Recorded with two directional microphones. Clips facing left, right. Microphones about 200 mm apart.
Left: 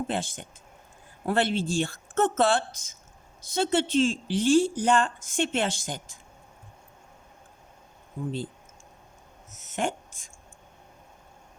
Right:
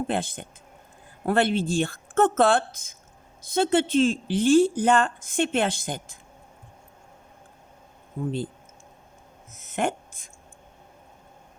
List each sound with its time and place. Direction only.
0.1 s speech: 55° right (ahead or behind)
9.7 s speech: 55° right (ahead or behind)